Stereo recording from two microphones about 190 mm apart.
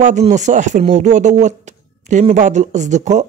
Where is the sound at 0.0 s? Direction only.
40° right (ahead or behind).